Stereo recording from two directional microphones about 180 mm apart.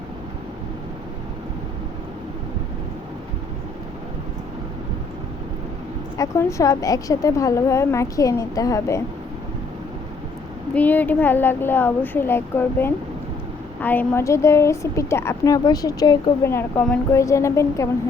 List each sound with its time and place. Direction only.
6.1 s a woman's voice: 15° left (ahead or behind)
10.8 s a woman's voice: 10° left (ahead or behind)